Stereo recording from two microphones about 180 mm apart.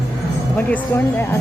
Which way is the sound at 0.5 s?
10° left (ahead or behind).